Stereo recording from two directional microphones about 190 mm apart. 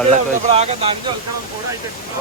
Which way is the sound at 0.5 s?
35° right (ahead or behind).